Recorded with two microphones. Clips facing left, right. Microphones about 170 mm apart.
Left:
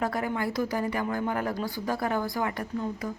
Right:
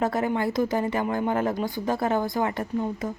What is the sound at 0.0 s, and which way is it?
Speech, 25° right (ahead or behind).